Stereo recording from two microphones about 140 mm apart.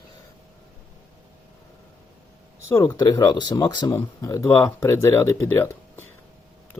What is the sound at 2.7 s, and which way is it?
Speech, 20° left (ahead or behind).